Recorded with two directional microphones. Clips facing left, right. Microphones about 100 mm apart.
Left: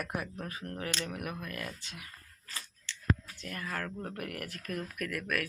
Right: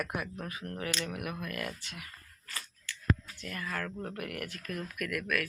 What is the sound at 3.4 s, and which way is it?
Speech, 35° left (ahead or behind).